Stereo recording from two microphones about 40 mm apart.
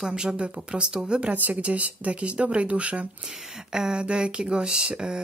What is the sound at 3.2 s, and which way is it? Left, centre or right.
Speech, centre.